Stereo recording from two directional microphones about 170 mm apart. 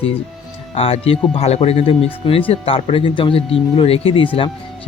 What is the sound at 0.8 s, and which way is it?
A man's voice, 35° left (ahead or behind).